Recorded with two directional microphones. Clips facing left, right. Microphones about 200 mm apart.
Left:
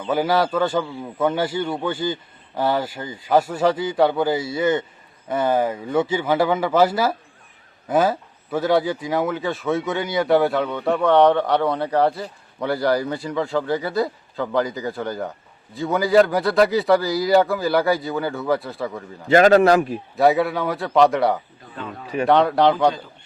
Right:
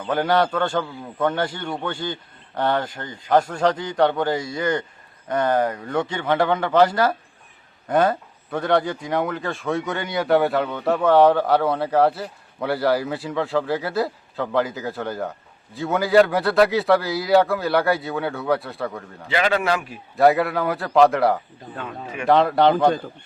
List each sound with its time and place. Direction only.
0.0 s a man's voice: 5° left (ahead or behind)
19.3 s speech: 45° left (ahead or behind)
20.1 s speech: centre (ahead or behind)